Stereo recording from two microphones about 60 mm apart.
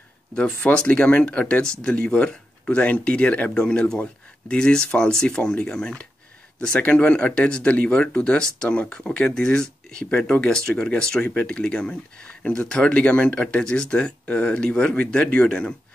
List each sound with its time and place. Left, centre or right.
0.3 s speech: centre